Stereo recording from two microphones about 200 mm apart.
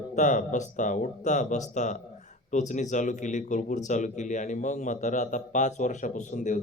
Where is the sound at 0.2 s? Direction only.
40° left (ahead or behind).